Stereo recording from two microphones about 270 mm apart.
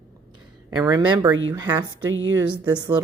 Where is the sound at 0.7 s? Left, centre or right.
Centre.